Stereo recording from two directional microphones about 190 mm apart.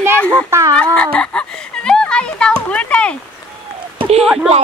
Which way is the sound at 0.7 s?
5° left (ahead or behind).